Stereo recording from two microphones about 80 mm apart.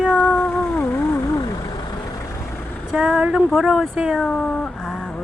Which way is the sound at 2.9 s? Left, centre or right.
Centre.